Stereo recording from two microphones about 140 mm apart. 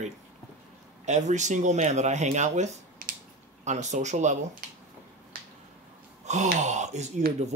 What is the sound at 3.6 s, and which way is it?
Speech, 55° right (ahead or behind).